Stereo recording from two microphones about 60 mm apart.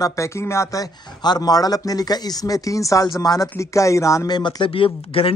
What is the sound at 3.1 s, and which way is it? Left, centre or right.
Speech, left.